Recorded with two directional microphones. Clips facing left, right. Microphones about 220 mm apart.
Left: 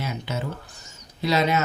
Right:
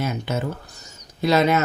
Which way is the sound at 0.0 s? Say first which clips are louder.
Right 5 dB; 50° right (ahead or behind).